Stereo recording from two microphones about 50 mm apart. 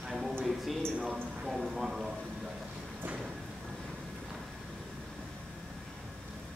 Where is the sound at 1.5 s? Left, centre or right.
Centre.